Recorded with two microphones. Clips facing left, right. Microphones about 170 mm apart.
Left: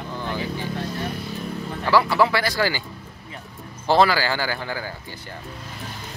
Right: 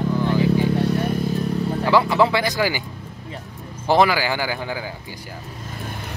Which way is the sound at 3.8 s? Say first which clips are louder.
Right 1 dB; 15° right (ahead or behind).